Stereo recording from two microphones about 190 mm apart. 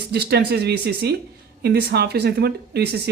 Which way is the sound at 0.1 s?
60° right (ahead or behind).